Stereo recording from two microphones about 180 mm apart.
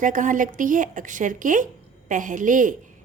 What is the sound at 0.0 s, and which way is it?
A woman's voice, 45° right (ahead or behind).